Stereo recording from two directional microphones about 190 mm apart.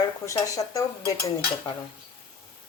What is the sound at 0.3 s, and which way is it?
Stir, 15° left (ahead or behind).